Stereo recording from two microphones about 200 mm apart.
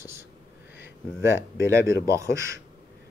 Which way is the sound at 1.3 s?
15° right (ahead or behind).